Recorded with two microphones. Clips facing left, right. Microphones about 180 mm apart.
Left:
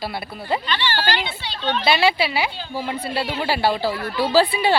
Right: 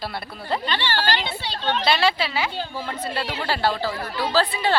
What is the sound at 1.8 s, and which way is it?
A woman's voice, 5° left (ahead or behind).